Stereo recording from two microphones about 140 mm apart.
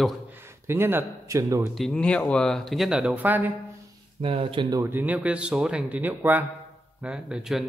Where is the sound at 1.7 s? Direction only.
5° left (ahead or behind); by 3.5 s 10° right (ahead or behind).